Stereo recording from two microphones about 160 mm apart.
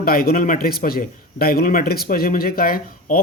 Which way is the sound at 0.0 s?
70° left (ahead or behind).